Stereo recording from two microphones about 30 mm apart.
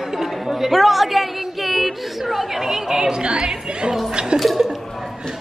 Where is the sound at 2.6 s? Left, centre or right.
Centre.